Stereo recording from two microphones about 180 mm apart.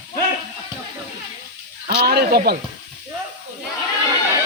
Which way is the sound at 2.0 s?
60° right (ahead or behind).